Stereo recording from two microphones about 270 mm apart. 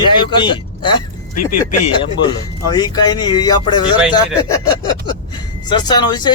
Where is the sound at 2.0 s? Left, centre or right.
Centre.